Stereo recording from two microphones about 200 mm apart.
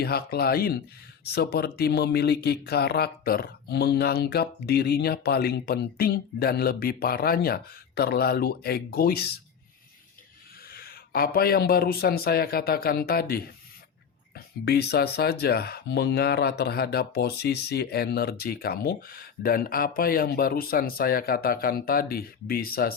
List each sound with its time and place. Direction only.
0.0 s speech: 50° left (ahead or behind)
10.7 s a sound: 50° left (ahead or behind)
11.3 s speech: 50° left (ahead or behind)